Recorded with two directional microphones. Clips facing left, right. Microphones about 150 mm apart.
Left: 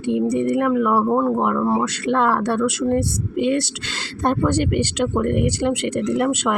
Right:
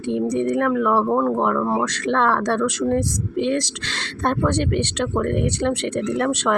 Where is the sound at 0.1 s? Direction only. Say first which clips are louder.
Left 2 dB; 5° left (ahead or behind).